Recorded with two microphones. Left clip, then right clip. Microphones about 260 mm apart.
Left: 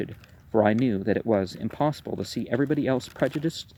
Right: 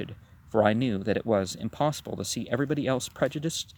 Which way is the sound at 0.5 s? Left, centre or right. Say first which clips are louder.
Left 2 dB; right.